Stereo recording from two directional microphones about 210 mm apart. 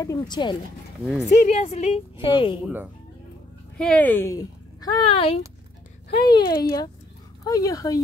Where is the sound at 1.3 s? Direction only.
35° left (ahead or behind).